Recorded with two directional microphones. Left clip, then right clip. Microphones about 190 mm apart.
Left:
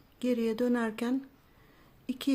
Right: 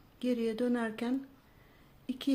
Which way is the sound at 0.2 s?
15° left (ahead or behind).